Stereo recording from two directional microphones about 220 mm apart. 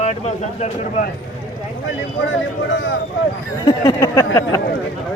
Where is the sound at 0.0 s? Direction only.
30° left (ahead or behind).